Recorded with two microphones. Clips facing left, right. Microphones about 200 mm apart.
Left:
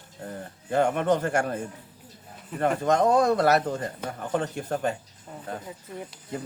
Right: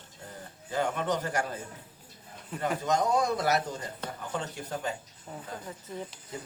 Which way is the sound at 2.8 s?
55° left (ahead or behind).